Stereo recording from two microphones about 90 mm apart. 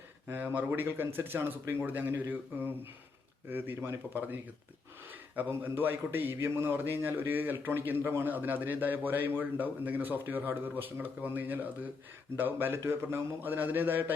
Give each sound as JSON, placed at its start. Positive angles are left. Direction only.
{"t": 0.3, "sound": "a man's voice", "side_deg": -20}